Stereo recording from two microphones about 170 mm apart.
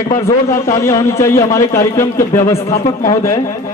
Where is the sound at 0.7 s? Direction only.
15° left (ahead or behind).